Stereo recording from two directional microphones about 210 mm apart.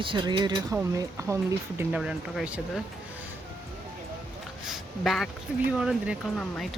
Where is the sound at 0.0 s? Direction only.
25° right (ahead or behind); by 2.8 s 5° right (ahead or behind).